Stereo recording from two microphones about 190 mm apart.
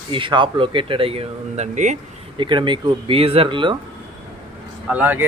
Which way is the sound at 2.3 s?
25° right (ahead or behind).